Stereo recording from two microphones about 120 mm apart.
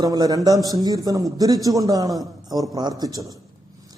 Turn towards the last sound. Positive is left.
turn(degrees=-30)  # may be behind; listen again after turning